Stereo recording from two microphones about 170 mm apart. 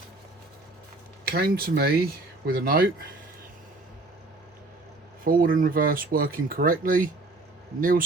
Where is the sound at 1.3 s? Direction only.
65° right (ahead or behind).